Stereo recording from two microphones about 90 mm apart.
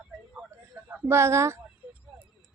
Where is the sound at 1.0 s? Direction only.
30° right (ahead or behind).